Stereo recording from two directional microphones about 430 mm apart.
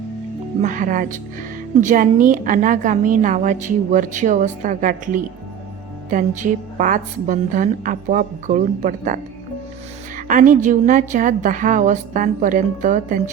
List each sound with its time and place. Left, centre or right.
0.6 s a woman's voice: centre